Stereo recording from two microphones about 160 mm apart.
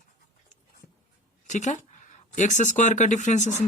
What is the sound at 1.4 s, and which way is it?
Speech, 50° left (ahead or behind).